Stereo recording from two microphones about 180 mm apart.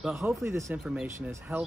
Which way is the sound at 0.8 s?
5° right (ahead or behind).